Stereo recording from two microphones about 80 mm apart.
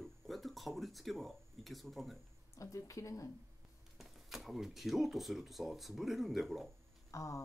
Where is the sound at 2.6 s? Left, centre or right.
Left.